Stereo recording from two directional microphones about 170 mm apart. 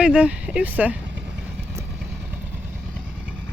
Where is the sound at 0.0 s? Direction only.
5° right (ahead or behind).